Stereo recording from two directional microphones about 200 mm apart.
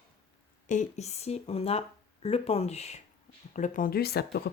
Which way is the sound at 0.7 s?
35° left (ahead or behind).